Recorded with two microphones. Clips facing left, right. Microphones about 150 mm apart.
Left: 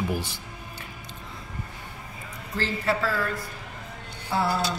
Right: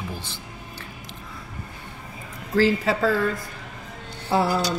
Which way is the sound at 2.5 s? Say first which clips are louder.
Right 8 dB; 90° right.